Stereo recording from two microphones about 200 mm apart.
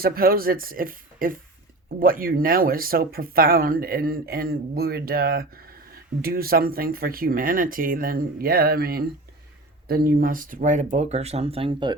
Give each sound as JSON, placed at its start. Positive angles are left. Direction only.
{"t": 0.0, "sound": "speech", "side_deg": -45}